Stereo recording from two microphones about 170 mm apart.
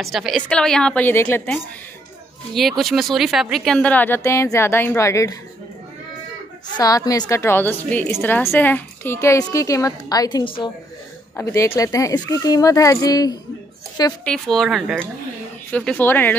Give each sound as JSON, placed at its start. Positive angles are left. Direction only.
{"t": 0.0, "sound": "a woman's voice", "side_deg": 0}
{"t": 2.8, "sound": "speech", "side_deg": 0}
{"t": 6.8, "sound": "speech", "side_deg": 20}
{"t": 11.3, "sound": "speech", "side_deg": 15}
{"t": 14.2, "sound": "a woman's voice", "side_deg": 5}